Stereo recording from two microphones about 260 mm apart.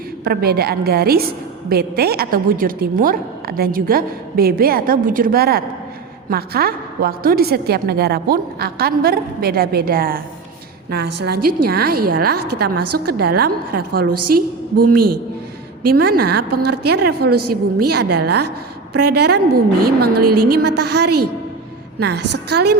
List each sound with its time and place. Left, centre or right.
0.3 s a woman's voice: right
12.8 s music: right
13.1 s a woman's voice: right
14.1 s music: right
14.3 s a woman's voice: right
14.9 s a man's voice: right
15.8 s a woman's voice: right
20.1 s music: right
21.9 s a woman's voice: right
22.2 s music: right